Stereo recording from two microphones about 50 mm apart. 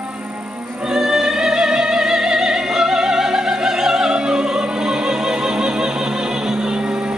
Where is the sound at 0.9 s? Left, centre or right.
Centre.